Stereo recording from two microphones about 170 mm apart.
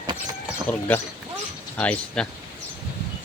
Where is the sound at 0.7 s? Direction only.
10° left (ahead or behind).